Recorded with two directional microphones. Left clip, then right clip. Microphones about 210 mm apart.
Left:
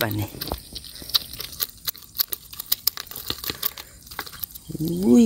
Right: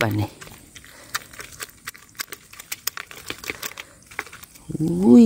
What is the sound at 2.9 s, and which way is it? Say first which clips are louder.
Crumpling: even; 5° right (ahead or behind).